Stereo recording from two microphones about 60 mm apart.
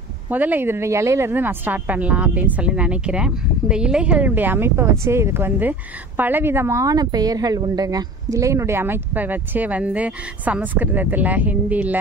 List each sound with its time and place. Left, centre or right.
0.3 s speech: right
0.7 s speech: right; by 4.3 s centre
4.4 s speech: right
6.8 s speech: right